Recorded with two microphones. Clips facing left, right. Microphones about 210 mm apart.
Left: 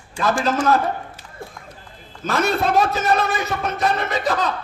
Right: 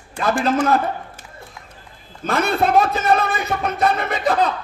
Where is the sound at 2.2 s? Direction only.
55° right (ahead or behind).